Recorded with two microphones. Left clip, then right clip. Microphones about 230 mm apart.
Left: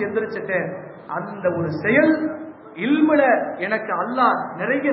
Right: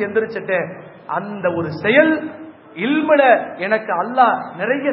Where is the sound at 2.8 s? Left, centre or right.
Right.